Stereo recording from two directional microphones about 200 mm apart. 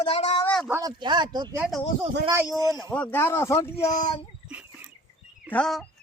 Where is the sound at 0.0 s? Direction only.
30° left (ahead or behind).